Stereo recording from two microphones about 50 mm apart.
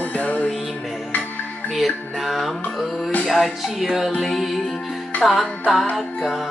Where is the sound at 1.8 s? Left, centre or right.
Centre.